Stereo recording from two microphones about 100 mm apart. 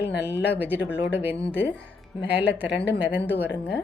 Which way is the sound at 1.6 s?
15° left (ahead or behind).